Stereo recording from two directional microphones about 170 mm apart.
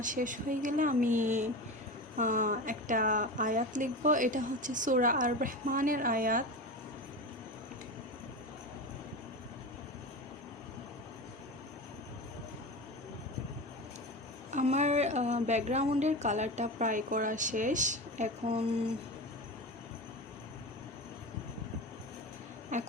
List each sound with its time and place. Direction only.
0.0 s a woman's voice: 50° right (ahead or behind)
14.5 s a woman's voice: 40° right (ahead or behind)
22.7 s speech: 45° right (ahead or behind)